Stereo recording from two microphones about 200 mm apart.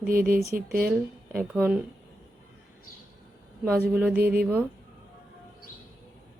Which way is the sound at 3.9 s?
5° right (ahead or behind).